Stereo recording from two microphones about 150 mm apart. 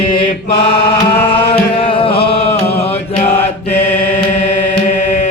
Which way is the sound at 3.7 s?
50° left (ahead or behind).